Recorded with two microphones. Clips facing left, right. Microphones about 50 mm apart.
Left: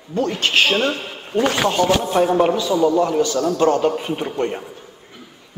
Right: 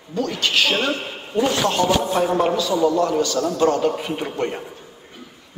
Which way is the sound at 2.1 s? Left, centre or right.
Centre.